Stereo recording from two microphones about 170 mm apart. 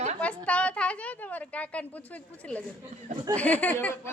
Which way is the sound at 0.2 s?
10° left (ahead or behind).